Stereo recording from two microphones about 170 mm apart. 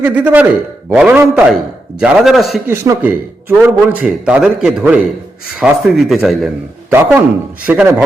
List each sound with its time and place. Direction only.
0.0 s a man's voice: 10° right (ahead or behind)
2.6 s speech: 20° right (ahead or behind)
3.0 s a man's voice: 10° right (ahead or behind)
6.9 s a man's voice: 10° right (ahead or behind)